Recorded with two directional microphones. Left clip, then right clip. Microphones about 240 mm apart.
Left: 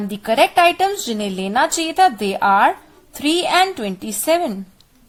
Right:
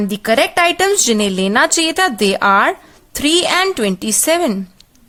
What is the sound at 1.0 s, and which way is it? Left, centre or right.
Speech, right.